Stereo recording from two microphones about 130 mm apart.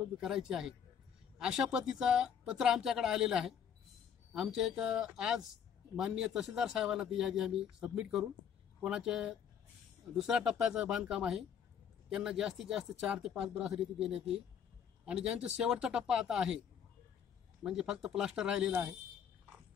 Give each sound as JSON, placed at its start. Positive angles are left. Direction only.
{"t": 0.2, "sound": "a man's voice", "side_deg": -5}
{"t": 17.6, "sound": "a man's voice", "side_deg": -5}